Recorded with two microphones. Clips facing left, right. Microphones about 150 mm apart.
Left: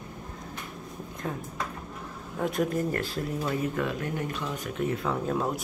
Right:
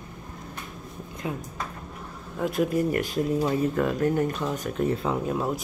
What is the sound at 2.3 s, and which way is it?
Speech, centre (ahead or behind).